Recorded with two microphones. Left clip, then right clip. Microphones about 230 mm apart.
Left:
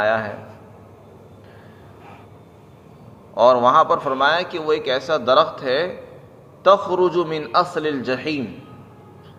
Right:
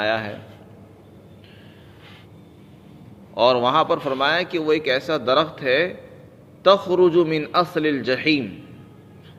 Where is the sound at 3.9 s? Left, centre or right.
Right.